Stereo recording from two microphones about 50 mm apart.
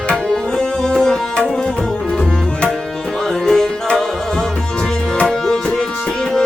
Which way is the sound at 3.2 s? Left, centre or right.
Centre.